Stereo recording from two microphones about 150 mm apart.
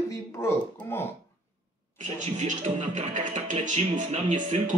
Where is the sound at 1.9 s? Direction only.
55° right (ahead or behind).